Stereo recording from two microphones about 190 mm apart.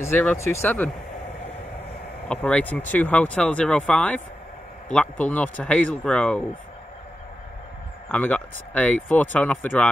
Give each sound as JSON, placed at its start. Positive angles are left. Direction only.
{"t": 0.0, "sound": "speech", "side_deg": 10}
{"t": 2.2, "sound": "speech", "side_deg": 5}
{"t": 8.1, "sound": "speech", "side_deg": 10}